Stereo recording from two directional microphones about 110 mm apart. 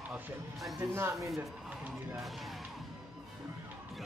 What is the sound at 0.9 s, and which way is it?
Speech, 25° right (ahead or behind).